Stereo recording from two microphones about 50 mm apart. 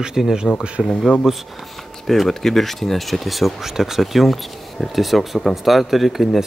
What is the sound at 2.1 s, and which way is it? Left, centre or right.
Speech, centre.